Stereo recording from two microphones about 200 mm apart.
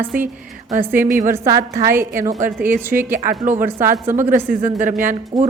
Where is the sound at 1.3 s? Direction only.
15° right (ahead or behind).